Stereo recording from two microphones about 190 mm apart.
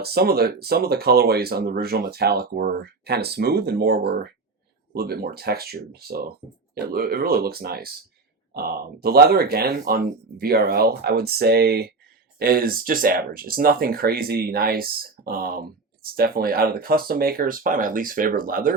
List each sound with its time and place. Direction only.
0.0 s speech: 55° right (ahead or behind)